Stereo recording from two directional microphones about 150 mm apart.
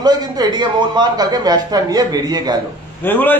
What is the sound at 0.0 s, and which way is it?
A man's voice, 25° right (ahead or behind).